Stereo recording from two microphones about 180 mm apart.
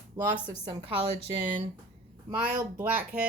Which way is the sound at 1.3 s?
30° right (ahead or behind).